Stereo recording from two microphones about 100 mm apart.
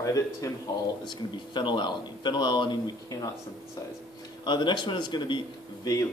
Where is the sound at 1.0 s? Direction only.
50° left (ahead or behind).